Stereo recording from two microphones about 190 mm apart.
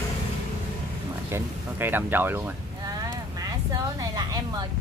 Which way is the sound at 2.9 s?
20° right (ahead or behind).